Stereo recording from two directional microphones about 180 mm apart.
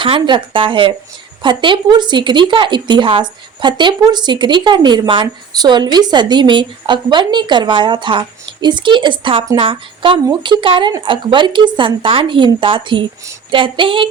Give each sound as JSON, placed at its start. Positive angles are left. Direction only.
{"t": 0.0, "sound": "speech", "side_deg": -30}